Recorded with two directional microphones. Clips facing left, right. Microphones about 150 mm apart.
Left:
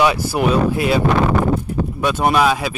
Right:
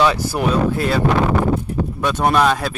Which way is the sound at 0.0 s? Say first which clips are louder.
Left 1 dB; 10° left (ahead or behind).